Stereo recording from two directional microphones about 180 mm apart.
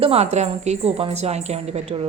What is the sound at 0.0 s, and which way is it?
Speech, 35° right (ahead or behind).